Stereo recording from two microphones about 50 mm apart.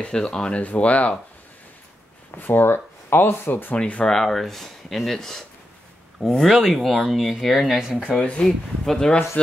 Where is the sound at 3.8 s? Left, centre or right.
Left.